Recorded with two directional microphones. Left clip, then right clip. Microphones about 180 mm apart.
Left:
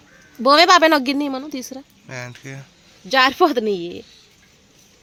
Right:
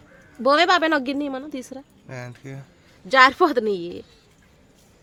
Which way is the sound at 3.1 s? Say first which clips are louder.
Even; 25° left (ahead or behind).